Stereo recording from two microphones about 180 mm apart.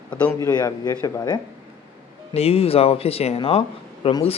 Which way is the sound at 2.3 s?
35° left (ahead or behind).